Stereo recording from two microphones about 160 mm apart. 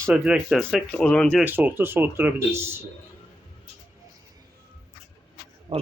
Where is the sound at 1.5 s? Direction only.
10° right (ahead or behind).